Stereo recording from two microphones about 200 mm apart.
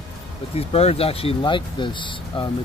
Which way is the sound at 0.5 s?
30° left (ahead or behind).